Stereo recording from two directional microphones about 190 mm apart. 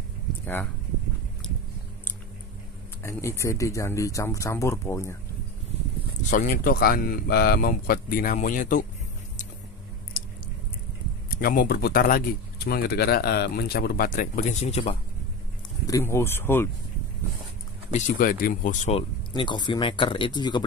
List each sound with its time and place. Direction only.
3.0 s speech: 15° left (ahead or behind)
6.3 s speech: 50° left (ahead or behind)
11.2 s speech: 50° left (ahead or behind)
15.9 s speech: 15° left (ahead or behind)
17.9 s speech: 45° left (ahead or behind)
18.9 s speech: 25° left (ahead or behind)